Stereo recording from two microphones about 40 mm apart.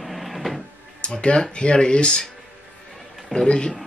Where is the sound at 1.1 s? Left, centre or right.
Left.